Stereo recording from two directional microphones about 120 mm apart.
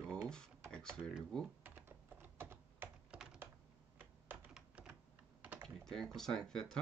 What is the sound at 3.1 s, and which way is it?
Computer keyboard, 5° right (ahead or behind).